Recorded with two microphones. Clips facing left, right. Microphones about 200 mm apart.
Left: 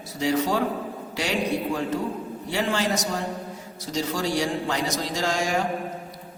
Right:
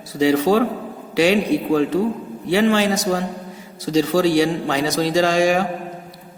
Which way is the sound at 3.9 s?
90° right.